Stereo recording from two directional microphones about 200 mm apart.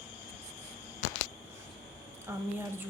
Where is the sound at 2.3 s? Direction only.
15° right (ahead or behind).